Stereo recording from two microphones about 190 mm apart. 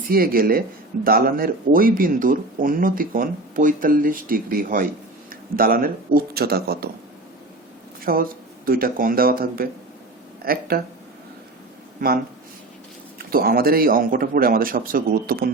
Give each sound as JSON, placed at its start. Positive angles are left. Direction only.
{"t": 0.1, "sound": "speech", "side_deg": -50}
{"t": 8.0, "sound": "speech", "side_deg": -50}
{"t": 11.9, "sound": "speech", "side_deg": -50}